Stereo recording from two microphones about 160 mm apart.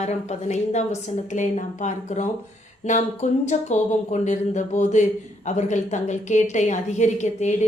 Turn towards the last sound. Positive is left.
turn(degrees=45)  # may be behind; listen again after turning